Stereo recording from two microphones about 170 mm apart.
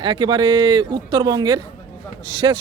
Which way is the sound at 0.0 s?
30° right (ahead or behind).